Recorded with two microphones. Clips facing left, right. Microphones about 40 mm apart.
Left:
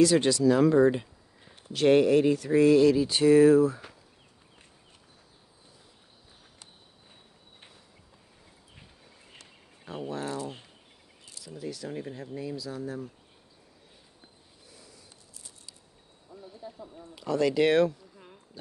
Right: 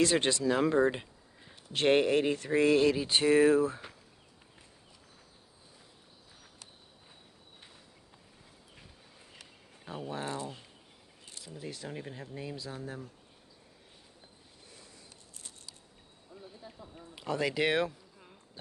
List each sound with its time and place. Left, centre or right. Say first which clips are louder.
0.0 s speech: left 6 dB; right; by 1.0 s centre
1.7 s speech: left 5 dB; right
10.0 s speech: left 3 dB; centre
11.3 s speech: left 5 dB; right
11.9 s speech: left 5 dB; centre
12.4 s speech: left 6 dB; right
16.3 s a sound: left 6 dB; centre
16.9 s speech: left 5 dB; right